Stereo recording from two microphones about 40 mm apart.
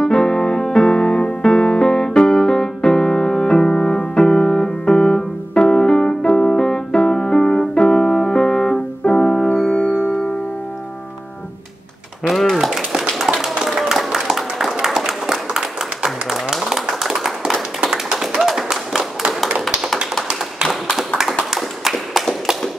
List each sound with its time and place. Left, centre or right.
0.0 s piano: centre
12.6 s a sound: centre
17.8 s tap: centre
18.6 s clapping: centre
21.5 s tap: centre